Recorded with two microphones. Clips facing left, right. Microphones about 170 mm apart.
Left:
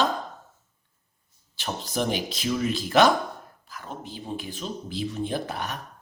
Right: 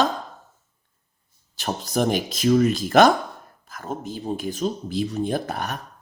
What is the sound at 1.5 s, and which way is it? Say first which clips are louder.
Speech: right 5 dB; 45° right (ahead or behind).